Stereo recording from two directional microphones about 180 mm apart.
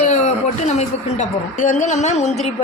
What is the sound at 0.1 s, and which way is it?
Speech, 40° left (ahead or behind).